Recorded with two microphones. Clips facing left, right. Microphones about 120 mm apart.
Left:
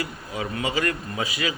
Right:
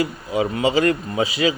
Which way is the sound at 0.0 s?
25° right (ahead or behind).